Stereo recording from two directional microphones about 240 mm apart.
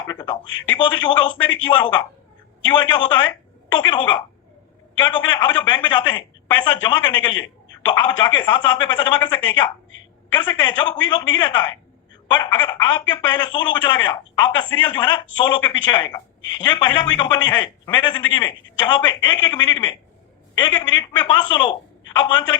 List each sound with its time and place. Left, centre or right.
0.1 s a sound: centre
0.7 s a man's voice: centre
10.4 s speech: centre